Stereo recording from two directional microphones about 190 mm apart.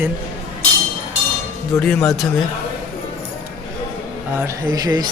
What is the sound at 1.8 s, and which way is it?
Speech, 5° left (ahead or behind).